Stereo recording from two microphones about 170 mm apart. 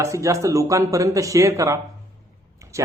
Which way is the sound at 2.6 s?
20° right (ahead or behind).